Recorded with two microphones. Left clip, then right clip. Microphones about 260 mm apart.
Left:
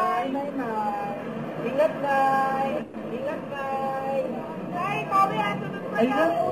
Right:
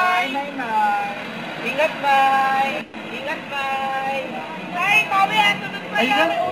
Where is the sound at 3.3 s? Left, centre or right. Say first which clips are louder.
Right 7 dB; centre.